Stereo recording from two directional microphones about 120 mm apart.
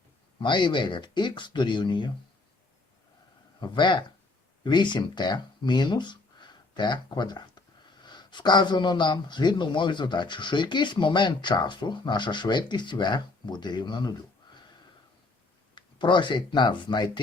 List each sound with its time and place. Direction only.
0.3 s speech: 40° left (ahead or behind)
3.6 s speech: 40° left (ahead or behind)
15.7 s speech: 40° left (ahead or behind)